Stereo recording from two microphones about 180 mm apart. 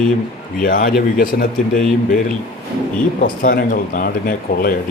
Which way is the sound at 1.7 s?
Centre (ahead or behind).